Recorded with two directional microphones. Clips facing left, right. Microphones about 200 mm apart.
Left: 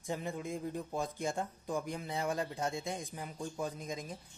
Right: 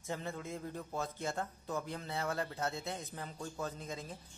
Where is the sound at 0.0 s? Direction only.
15° left (ahead or behind).